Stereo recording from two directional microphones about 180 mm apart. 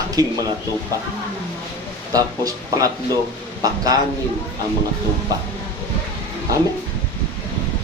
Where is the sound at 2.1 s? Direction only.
20° right (ahead or behind).